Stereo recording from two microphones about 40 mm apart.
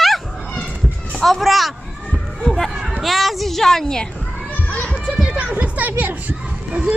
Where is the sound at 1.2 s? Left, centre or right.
Centre.